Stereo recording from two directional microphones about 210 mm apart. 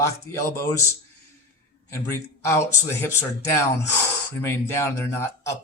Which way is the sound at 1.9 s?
15° left (ahead or behind).